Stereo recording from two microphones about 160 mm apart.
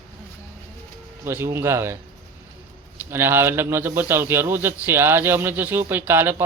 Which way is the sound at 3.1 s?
15° right (ahead or behind).